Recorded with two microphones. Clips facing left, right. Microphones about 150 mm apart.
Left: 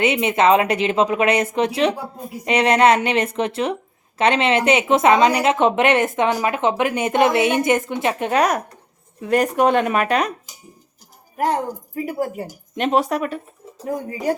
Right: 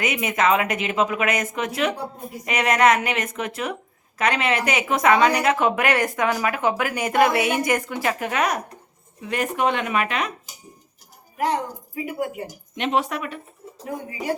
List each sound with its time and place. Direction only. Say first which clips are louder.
0.0 s a woman's voice: left 5 dB; 30° left (ahead or behind)
11.3 s a woman's voice: left 3 dB; 45° left (ahead or behind)